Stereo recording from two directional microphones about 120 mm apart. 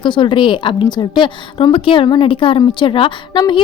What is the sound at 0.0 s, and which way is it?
A woman's voice, 40° left (ahead or behind).